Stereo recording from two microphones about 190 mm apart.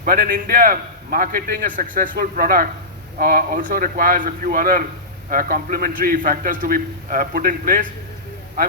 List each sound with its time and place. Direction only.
0.0 s a man's voice: 50° right (ahead or behind)